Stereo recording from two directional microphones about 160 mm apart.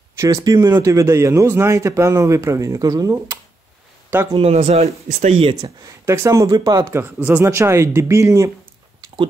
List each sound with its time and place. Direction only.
0.2 s a man's voice: 20° right (ahead or behind)
4.6 s speech: 40° right (ahead or behind)
5.0 s speech: 60° right (ahead or behind)
5.3 s speech: 40° right (ahead or behind)
6.0 s speech: 20° right (ahead or behind)